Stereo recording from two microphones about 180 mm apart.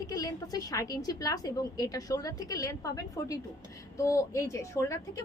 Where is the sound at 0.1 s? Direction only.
20° left (ahead or behind).